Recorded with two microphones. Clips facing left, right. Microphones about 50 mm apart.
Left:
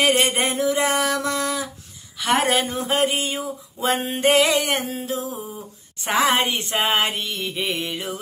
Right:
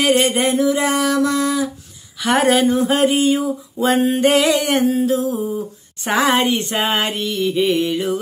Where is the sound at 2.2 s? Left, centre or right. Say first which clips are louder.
Right 3 dB; right.